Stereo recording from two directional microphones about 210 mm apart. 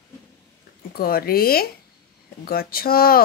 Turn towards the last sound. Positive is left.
turn(degrees=45)  # may be behind; listen again after turning